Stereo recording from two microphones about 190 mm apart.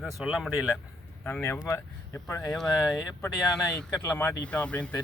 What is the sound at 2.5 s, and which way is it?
Speech, 5° left (ahead or behind).